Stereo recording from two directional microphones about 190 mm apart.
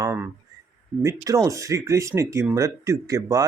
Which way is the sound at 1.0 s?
15° right (ahead or behind).